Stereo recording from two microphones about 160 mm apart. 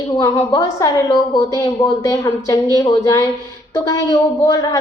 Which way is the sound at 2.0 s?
25° left (ahead or behind).